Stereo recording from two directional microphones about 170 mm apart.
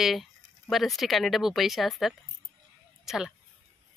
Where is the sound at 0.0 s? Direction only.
Centre (ahead or behind).